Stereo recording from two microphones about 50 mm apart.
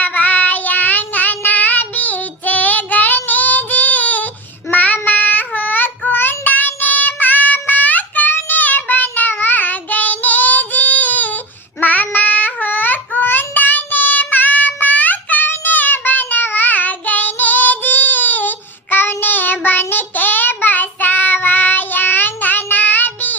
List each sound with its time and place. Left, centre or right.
0.0 s child singing: left